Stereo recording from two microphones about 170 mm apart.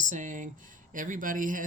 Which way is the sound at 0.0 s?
50° right (ahead or behind).